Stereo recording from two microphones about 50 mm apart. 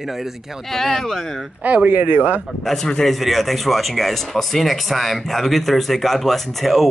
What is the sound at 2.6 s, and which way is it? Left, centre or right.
Speech, centre.